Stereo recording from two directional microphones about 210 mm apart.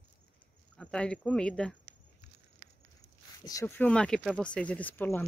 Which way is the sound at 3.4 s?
15° left (ahead or behind).